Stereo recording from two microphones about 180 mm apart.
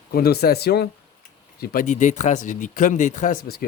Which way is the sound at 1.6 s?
45° left (ahead or behind).